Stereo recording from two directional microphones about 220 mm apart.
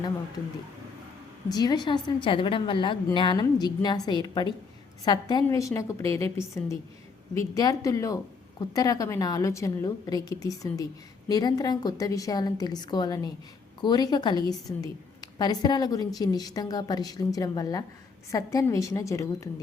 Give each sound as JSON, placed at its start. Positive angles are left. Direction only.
{"t": 1.5, "sound": "a woman's voice", "side_deg": 15}